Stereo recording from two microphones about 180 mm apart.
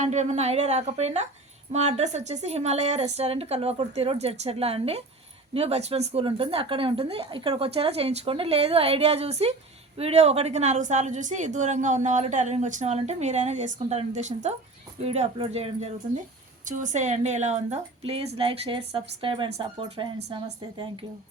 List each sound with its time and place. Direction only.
0.0 s a woman's voice: 40° right (ahead or behind)
16.6 s a woman's voice: 45° right (ahead or behind); by 21.0 s 25° right (ahead or behind)